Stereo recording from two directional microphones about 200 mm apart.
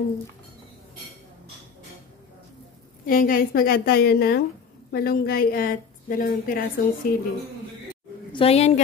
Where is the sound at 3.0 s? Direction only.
45° left (ahead or behind).